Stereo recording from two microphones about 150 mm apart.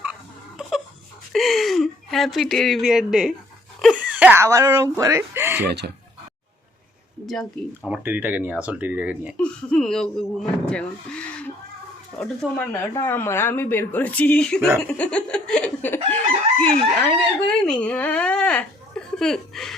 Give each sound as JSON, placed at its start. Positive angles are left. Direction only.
{"t": 0.6, "sound": "crying", "side_deg": -5}
{"t": 1.3, "sound": "speech", "side_deg": 0}
{"t": 3.8, "sound": "dog", "side_deg": 0}
{"t": 4.0, "sound": "wail", "side_deg": -10}
{"t": 4.4, "sound": "speech", "side_deg": -20}
{"t": 5.6, "sound": "speech", "side_deg": -90}
{"t": 7.9, "sound": "speech", "side_deg": -10}
{"t": 9.4, "sound": "speech", "side_deg": 5}
{"t": 10.7, "sound": "a sound", "side_deg": 5}
{"t": 12.2, "sound": "speech", "side_deg": 5}
{"t": 16.0, "sound": "chicken", "side_deg": 10}
{"t": 17.4, "sound": "speech", "side_deg": 5}